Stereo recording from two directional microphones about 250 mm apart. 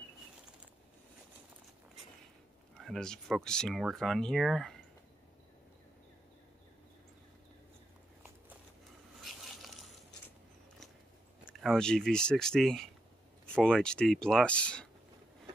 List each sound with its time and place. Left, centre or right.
2.8 s speech: centre
9.2 s crushing: centre
11.6 s speech: centre